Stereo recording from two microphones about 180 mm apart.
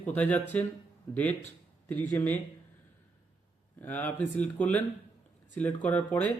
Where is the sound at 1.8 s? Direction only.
10° left (ahead or behind).